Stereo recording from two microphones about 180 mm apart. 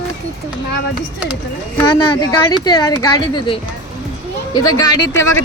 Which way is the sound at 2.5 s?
20° left (ahead or behind).